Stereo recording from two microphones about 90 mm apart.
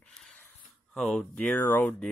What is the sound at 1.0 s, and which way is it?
Speech, 10° left (ahead or behind).